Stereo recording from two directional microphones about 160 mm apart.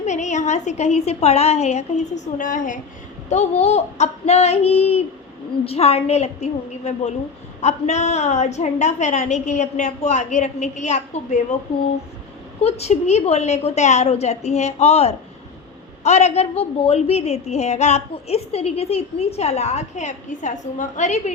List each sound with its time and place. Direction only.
0.0 s a woman's voice: 45° left (ahead or behind)
2.4 s a woman's voice: 55° left (ahead or behind)
3.2 s female singing: 45° left (ahead or behind)
5.6 s a woman's voice: 40° left (ahead or behind)
12.6 s a woman's voice: 45° left (ahead or behind)